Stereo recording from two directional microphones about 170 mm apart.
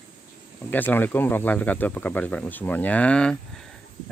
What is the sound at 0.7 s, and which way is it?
Speech, 10° left (ahead or behind).